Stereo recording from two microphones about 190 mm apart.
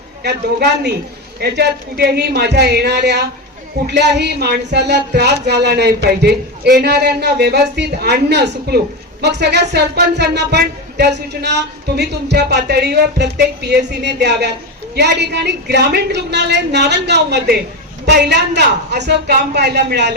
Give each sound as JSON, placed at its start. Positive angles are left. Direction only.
{"t": 0.2, "sound": "speech", "side_deg": -60}